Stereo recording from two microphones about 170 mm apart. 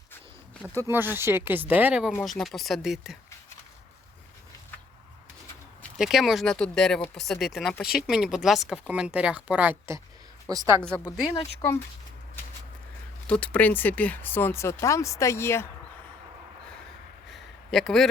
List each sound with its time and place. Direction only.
0.8 s speech: 15° right (ahead or behind)
6.0 s speech: centre (ahead or behind)
13.2 s speech: 5° left (ahead or behind)
17.3 s a sound: centre (ahead or behind)